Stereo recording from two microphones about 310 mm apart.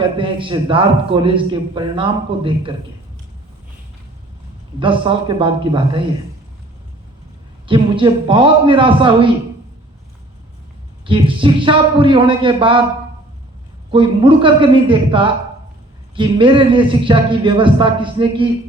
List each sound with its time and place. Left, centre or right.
0.0 s a man's voice: centre
4.8 s a man's voice: centre
7.7 s a man's voice: centre
11.0 s a man's voice: centre
13.9 s a man's voice: centre